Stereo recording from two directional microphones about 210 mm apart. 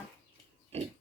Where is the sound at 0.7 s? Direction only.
30° right (ahead or behind).